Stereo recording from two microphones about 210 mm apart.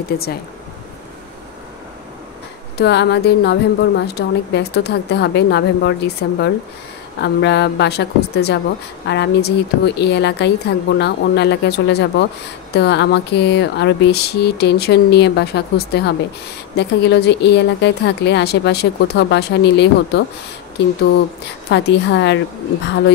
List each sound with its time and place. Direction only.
2.8 s a woman's voice: 55° left (ahead or behind)
21.6 s a woman's voice: 50° left (ahead or behind)